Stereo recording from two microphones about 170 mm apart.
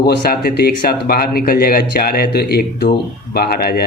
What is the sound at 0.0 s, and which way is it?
A man's voice, 65° left (ahead or behind).